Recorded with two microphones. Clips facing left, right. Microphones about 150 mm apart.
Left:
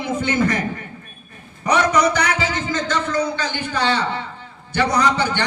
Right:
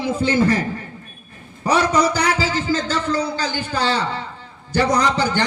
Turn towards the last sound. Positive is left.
turn(degrees=-35)  # may be behind; listen again after turning